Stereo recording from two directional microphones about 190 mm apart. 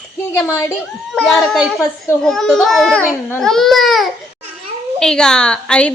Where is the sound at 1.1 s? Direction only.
Centre (ahead or behind).